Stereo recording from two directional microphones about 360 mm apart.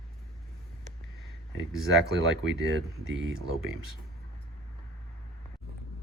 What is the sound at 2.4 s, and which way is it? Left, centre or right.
Speech, right.